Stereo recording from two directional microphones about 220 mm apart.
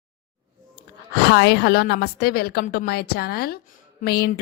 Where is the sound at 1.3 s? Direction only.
50° left (ahead or behind).